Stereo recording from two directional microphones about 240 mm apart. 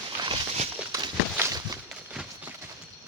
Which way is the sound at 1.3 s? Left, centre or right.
Centre.